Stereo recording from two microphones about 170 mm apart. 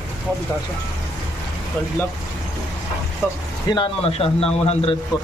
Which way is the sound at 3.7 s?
30° left (ahead or behind).